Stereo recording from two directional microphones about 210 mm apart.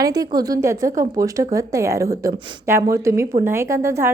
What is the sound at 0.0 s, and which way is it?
A woman's voice, 15° right (ahead or behind).